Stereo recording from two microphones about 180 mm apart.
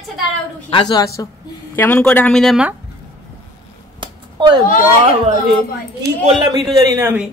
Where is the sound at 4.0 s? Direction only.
25° right (ahead or behind).